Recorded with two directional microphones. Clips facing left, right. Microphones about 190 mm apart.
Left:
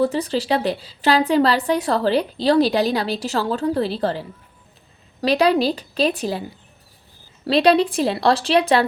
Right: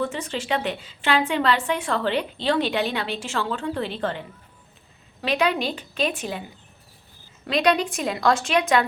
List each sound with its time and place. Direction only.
0.0 s a woman's voice: 35° left (ahead or behind)
7.4 s a woman's voice: 30° left (ahead or behind)